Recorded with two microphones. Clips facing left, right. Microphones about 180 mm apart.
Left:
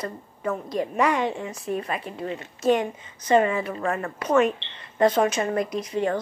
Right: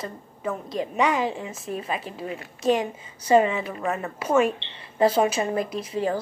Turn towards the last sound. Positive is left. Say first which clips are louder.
# left 1 dB
turn(degrees=-30)  # may be behind; listen again after turning